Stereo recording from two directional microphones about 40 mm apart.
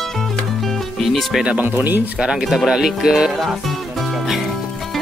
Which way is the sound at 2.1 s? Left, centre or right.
Centre.